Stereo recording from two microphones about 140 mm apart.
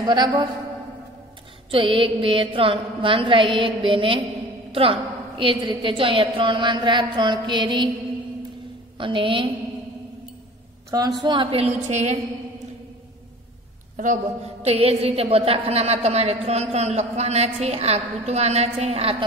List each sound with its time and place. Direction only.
0.0 s mantra: 35° right (ahead or behind)
1.7 s mantra: 40° right (ahead or behind)
5.4 s mantra: 40° right (ahead or behind)
8.9 s mantra: 35° right (ahead or behind)
10.9 s mantra: 30° right (ahead or behind)
11.6 s a woman's voice: 50° right (ahead or behind)
13.9 s a woman's voice: 65° right (ahead or behind); by 19.2 s 45° right (ahead or behind)